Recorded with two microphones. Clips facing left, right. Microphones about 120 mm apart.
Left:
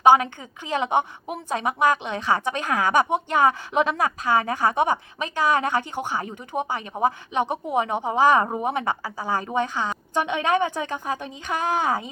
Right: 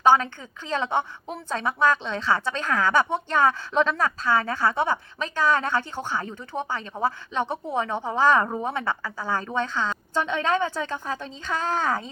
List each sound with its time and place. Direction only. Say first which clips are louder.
0.0 s a woman's voice: left 3 dB; 15° left (ahead or behind)